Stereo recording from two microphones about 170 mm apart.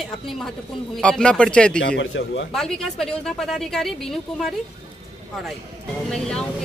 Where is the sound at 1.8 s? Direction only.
90° left.